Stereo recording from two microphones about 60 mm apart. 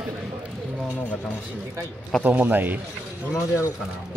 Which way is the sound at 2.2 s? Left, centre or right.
Right.